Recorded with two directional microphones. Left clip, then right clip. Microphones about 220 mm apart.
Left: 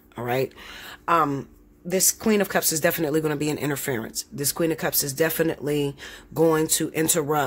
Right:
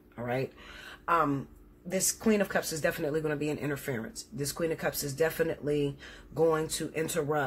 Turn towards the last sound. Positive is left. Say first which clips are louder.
# left 7 dB
turn(degrees=50)  # may be behind; listen again after turning